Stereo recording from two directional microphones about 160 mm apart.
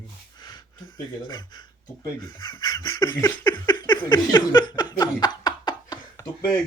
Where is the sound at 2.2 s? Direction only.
30° left (ahead or behind).